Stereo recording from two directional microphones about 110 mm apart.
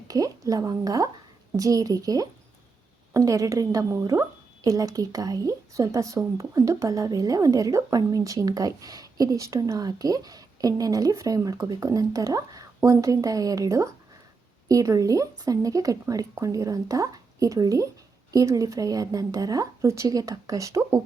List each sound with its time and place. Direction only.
0.1 s a woman's voice: 35° right (ahead or behind)